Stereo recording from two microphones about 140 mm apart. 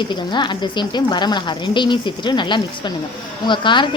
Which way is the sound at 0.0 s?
35° left (ahead or behind).